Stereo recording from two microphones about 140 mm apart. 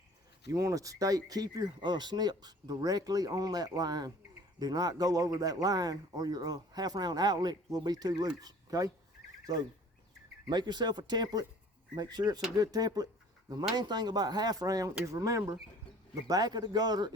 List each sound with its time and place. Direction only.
0.5 s speech: 25° right (ahead or behind)
10.5 s speech: 30° right (ahead or behind)